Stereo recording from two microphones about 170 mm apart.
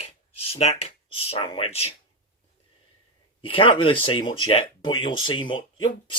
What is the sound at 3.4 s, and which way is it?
Speech, 30° left (ahead or behind).